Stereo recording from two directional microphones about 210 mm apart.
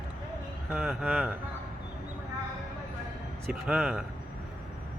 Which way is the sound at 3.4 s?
Centre (ahead or behind).